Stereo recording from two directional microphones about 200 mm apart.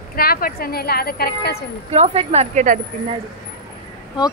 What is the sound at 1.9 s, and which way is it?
Speech, 30° right (ahead or behind).